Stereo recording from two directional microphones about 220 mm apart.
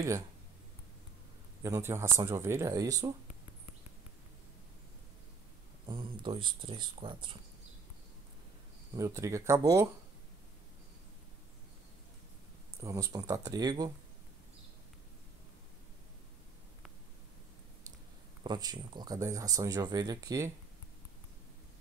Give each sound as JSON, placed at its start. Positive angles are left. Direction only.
{"t": 1.6, "sound": "speech", "side_deg": -10}
{"t": 5.9, "sound": "speech", "side_deg": -20}
{"t": 8.9, "sound": "speech", "side_deg": -15}
{"t": 12.7, "sound": "speech", "side_deg": -15}
{"t": 18.4, "sound": "speech", "side_deg": -20}